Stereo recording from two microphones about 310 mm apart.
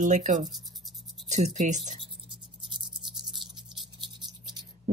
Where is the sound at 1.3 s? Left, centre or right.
Right.